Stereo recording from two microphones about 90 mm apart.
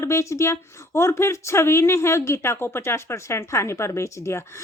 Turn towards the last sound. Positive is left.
turn(degrees=30)  # may be behind; listen again after turning